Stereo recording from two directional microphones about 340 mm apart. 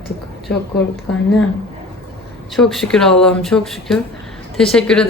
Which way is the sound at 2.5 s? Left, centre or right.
Centre.